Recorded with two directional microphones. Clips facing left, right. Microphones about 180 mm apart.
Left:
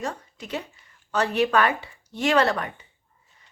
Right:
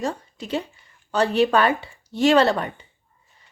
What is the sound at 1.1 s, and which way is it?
A woman's voice, 30° right (ahead or behind).